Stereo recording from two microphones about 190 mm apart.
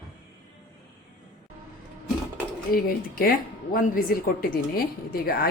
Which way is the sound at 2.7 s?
50° left (ahead or behind).